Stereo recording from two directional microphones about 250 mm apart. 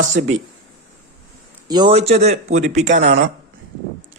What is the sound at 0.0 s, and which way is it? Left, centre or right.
Speech, right.